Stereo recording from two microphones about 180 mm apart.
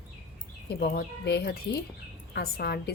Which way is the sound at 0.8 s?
60° left (ahead or behind).